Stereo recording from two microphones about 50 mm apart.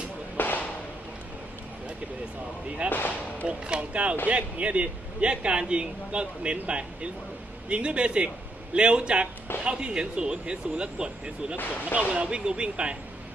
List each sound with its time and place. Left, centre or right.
0.3 s whip: left
2.6 s a man's voice: right
2.9 s a sound: left
3.4 s a man's voice: right
11.5 s speech: left
11.9 s a man's voice: right